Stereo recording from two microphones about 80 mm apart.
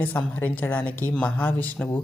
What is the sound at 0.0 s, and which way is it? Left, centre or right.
Speech, left.